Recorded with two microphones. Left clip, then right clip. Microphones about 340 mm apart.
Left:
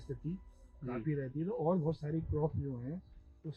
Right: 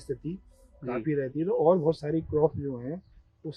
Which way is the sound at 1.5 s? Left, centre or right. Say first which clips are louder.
Right 12 dB; left.